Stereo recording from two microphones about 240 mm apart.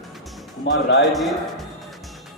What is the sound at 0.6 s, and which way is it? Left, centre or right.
Speech, left.